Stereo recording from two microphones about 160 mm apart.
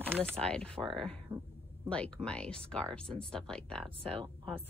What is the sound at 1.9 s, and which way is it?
A woman's voice, 5° left (ahead or behind).